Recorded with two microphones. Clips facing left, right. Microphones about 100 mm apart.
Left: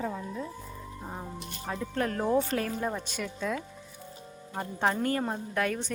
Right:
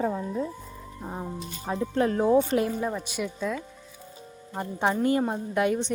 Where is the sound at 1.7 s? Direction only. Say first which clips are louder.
Right 6 dB; 20° right (ahead or behind).